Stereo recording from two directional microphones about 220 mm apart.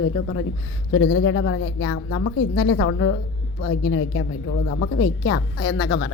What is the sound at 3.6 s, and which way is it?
Speech, 65° left (ahead or behind).